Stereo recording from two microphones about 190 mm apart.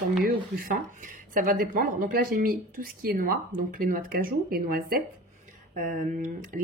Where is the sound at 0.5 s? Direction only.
50° right (ahead or behind).